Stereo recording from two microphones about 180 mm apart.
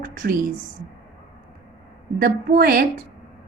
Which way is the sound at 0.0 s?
50° right (ahead or behind).